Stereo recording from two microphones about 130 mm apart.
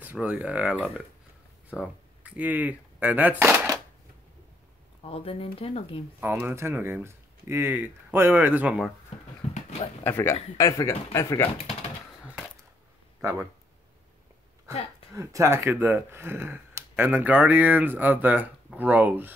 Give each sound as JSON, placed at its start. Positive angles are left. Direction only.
{"t": 0.0, "sound": "speech", "side_deg": -10}
{"t": 5.0, "sound": "speech", "side_deg": 50}
{"t": 6.2, "sound": "speech", "side_deg": -15}
{"t": 9.5, "sound": "dog", "side_deg": 60}
{"t": 10.0, "sound": "speech", "side_deg": 15}
{"t": 13.2, "sound": "speech", "side_deg": -25}
{"t": 14.7, "sound": "speech", "side_deg": 50}
{"t": 15.1, "sound": "speech", "side_deg": -25}